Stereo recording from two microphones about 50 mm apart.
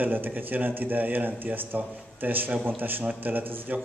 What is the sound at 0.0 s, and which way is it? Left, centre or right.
A man's voice, right.